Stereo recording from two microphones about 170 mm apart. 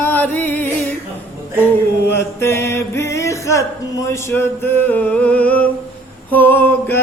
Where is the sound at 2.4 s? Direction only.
15° left (ahead or behind).